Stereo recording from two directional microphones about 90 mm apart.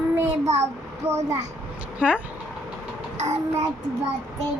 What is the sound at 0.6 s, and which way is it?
Speech, 30° right (ahead or behind).